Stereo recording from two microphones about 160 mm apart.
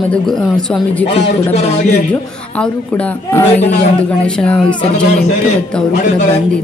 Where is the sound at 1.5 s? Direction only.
45° left (ahead or behind).